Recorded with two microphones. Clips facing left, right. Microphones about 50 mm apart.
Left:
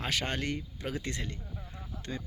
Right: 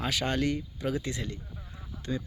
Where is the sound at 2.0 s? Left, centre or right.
Left.